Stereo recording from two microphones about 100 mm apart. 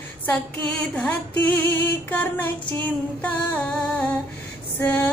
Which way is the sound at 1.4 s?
20° left (ahead or behind).